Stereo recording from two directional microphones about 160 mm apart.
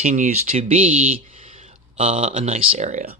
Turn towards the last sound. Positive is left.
turn(degrees=-45)  # may be behind; listen again after turning